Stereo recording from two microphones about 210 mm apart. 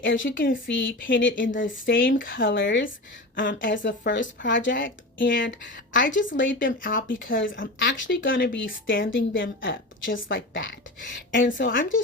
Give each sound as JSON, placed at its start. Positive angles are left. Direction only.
{"t": 0.0, "sound": "speech", "side_deg": 60}